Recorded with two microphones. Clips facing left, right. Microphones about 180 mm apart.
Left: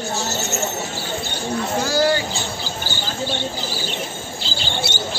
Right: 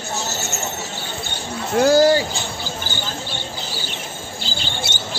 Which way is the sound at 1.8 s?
55° right (ahead or behind).